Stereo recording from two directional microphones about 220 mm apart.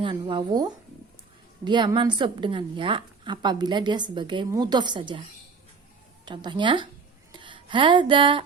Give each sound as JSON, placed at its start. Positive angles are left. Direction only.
{"t": 0.0, "sound": "speech", "side_deg": -20}
{"t": 6.2, "sound": "speech", "side_deg": -20}
{"t": 7.3, "sound": "music", "side_deg": -20}